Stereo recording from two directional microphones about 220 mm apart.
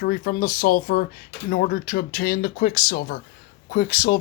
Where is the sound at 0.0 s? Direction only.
40° left (ahead or behind).